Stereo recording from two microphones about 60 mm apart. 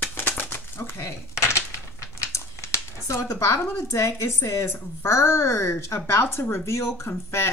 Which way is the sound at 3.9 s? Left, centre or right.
Left.